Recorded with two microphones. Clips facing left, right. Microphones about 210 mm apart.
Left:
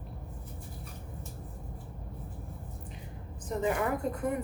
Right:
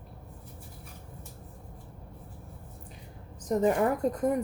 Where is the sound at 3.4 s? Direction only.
40° right (ahead or behind).